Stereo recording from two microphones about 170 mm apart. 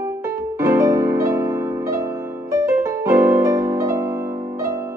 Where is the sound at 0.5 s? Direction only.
20° right (ahead or behind).